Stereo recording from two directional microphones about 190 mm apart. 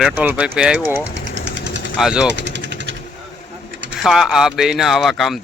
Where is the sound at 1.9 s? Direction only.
5° right (ahead or behind).